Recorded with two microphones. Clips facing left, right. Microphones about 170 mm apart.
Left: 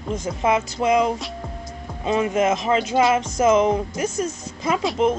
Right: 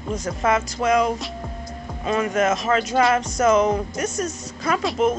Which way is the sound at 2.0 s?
20° left (ahead or behind).